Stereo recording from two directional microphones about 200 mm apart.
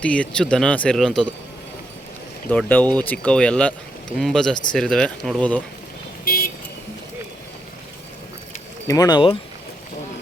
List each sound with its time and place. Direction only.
0.0 s speech: 5° left (ahead or behind)
2.5 s speech: 10° left (ahead or behind)
6.2 s vehicle: 45° left (ahead or behind)
8.9 s speech: 20° left (ahead or behind)